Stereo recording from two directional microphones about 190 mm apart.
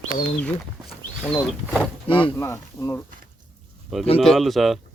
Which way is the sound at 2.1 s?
25° left (ahead or behind).